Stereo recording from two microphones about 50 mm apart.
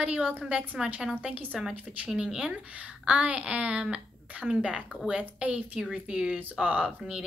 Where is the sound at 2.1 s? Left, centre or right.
Centre.